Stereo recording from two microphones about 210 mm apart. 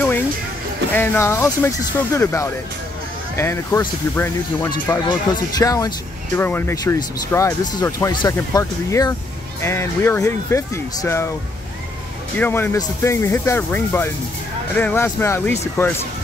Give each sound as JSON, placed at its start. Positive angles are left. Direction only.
{"t": 0.9, "sound": "speech", "side_deg": 10}
{"t": 12.4, "sound": "speech", "side_deg": 10}